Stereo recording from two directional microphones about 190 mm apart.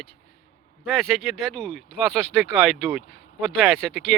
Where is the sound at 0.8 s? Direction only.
Centre (ahead or behind).